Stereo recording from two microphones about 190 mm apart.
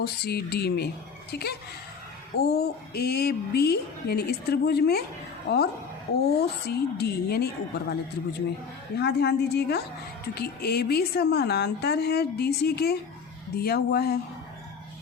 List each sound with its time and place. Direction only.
0.0 s speech: 55° left (ahead or behind)
6.7 s speech: 55° left (ahead or behind)